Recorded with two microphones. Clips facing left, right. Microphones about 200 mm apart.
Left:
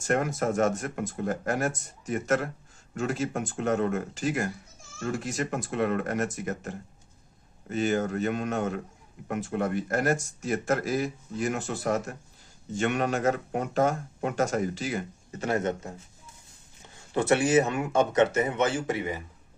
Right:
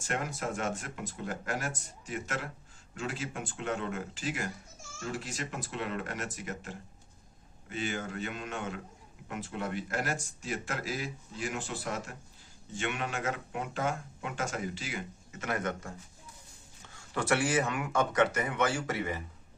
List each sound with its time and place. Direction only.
0.1 s speech: 45° left (ahead or behind); by 19.2 s 15° left (ahead or behind)